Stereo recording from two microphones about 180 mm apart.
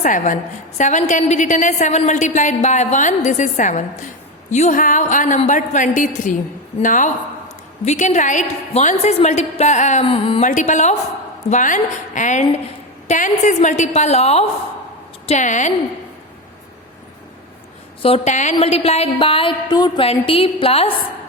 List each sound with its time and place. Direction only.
0.0 s a woman's voice: 45° left (ahead or behind)
10.4 s a woman's voice: 45° left (ahead or behind)
18.0 s a woman's voice: 35° left (ahead or behind)